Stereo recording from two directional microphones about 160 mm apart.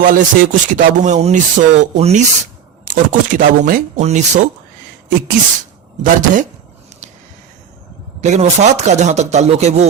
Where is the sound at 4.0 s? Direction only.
45° right (ahead or behind).